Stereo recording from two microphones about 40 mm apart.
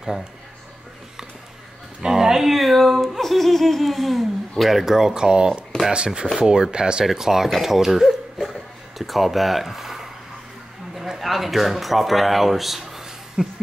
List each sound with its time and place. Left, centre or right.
2.0 s speech: centre
7.1 s speech: centre
7.4 s a sound: centre
11.0 s speech: centre